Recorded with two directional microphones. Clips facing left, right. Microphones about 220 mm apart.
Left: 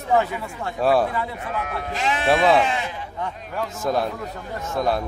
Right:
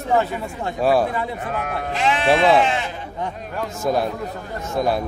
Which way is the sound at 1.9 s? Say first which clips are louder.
Right 4 dB; 40° left (ahead or behind).